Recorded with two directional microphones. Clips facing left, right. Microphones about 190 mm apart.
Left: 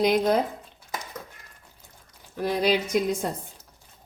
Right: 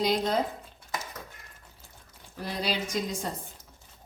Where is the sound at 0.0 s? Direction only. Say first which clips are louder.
Left 6 dB; 55° left (ahead or behind).